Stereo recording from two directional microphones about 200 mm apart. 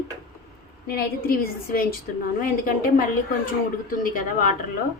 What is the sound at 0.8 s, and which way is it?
Speech, 50° left (ahead or behind).